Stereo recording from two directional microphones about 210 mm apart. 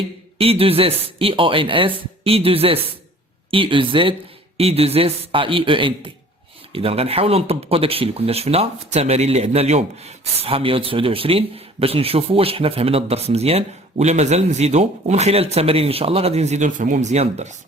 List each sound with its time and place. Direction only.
0.3 s speech: 25° right (ahead or behind)